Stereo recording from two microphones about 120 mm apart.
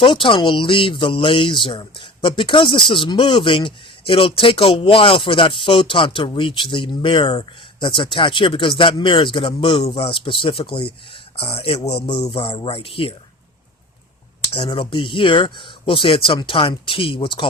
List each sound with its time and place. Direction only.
0.0 s speech: 45° left (ahead or behind)
12.0 s speech: 40° left (ahead or behind)
14.5 s speech: 45° left (ahead or behind)